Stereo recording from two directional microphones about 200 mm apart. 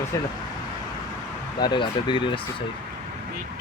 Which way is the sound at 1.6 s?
20° left (ahead or behind).